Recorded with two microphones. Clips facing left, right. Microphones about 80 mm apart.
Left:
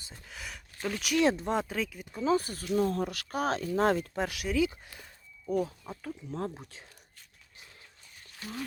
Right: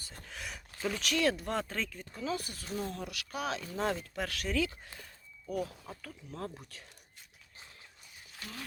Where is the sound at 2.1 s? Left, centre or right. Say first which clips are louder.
Left 9 dB; left.